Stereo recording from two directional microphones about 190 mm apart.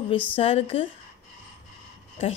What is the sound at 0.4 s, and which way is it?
Speech, 30° left (ahead or behind).